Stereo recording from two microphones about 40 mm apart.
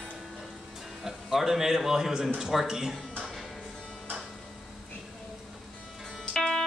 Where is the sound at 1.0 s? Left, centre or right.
Centre.